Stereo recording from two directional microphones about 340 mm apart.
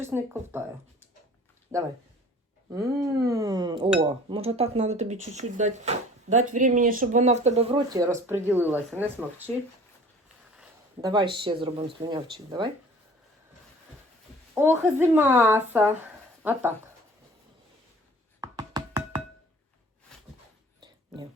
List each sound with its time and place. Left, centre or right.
0.0 s speech: centre
1.7 s speech: centre
3.2 s speech: centre
10.6 s speech: centre
14.5 s speech: centre
18.3 s music: centre